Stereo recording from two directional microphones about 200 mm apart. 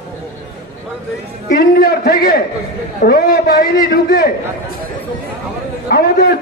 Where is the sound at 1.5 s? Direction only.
50° left (ahead or behind).